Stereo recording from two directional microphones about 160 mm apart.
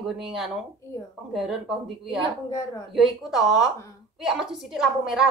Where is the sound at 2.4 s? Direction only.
20° left (ahead or behind).